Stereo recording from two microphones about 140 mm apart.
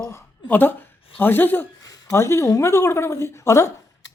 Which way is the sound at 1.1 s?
15° left (ahead or behind).